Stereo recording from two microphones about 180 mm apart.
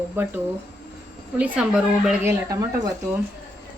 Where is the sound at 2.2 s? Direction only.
20° right (ahead or behind).